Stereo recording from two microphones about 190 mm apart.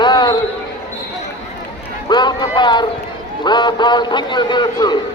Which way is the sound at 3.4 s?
25° left (ahead or behind).